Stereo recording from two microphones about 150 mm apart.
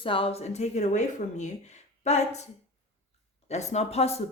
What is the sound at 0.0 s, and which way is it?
Speech, 35° left (ahead or behind).